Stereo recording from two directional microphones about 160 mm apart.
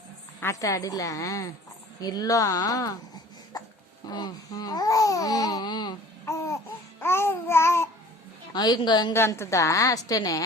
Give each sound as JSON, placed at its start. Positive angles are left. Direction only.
{"t": 0.3, "sound": "a woman's voice", "side_deg": 20}
{"t": 4.1, "sound": "speech", "side_deg": 25}
{"t": 7.0, "sound": "babbling", "side_deg": 15}
{"t": 8.5, "sound": "a woman's voice", "side_deg": 25}
{"t": 9.1, "sound": "a woman's voice", "side_deg": 15}